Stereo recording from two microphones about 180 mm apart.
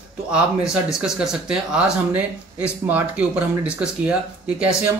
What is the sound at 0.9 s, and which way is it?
Speech, 5° right (ahead or behind).